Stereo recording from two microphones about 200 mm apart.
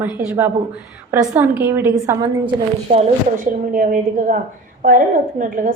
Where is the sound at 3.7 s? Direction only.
40° right (ahead or behind).